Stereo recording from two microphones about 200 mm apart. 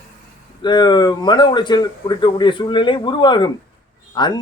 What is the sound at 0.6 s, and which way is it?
Speech, 20° left (ahead or behind).